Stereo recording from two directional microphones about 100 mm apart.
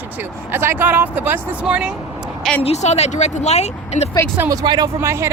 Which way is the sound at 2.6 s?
85° left.